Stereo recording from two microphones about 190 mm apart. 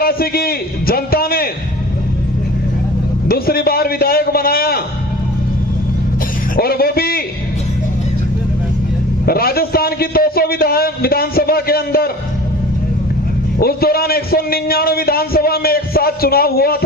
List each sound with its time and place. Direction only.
0.0 s a man's voice: 50° left (ahead or behind)
3.2 s a man's voice: 50° left (ahead or behind)
6.6 s a man's voice: 55° left (ahead or behind)
9.2 s a man's voice: 55° left (ahead or behind)
13.6 s a man's voice: 55° left (ahead or behind)